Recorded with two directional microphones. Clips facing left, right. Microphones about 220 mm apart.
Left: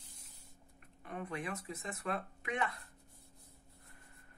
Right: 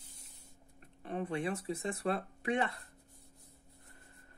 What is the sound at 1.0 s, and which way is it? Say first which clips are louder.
Speech: right 6 dB; 30° right (ahead or behind).